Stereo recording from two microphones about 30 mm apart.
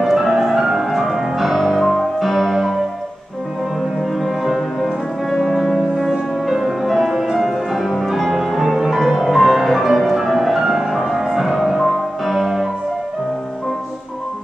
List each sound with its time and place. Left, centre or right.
0.0 s music: centre
1.7 s music: centre
6.4 s music: centre
7.3 s music: centre
10.6 s music: centre